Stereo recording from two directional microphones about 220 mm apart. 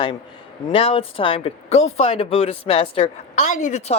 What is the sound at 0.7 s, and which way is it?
Speech, 25° left (ahead or behind).